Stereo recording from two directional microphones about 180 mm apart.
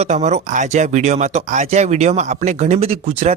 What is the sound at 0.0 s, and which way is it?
Speech, 40° right (ahead or behind).